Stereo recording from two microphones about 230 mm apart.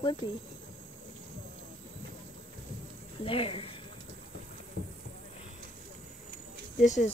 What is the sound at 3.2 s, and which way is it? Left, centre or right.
Speech, left.